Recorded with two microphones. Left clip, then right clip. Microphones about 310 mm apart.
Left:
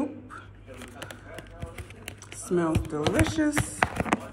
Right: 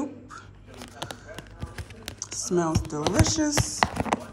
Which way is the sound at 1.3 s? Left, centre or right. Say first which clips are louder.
Even; right.